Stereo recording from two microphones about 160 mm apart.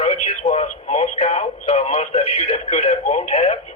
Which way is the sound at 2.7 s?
45° left (ahead or behind).